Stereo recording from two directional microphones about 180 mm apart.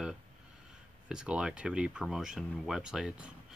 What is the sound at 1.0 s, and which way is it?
Speech, 5° right (ahead or behind).